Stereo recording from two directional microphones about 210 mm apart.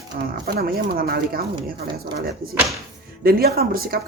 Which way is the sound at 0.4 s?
45° right (ahead or behind).